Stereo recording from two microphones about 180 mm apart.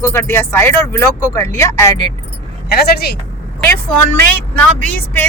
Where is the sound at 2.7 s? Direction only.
60° left (ahead or behind).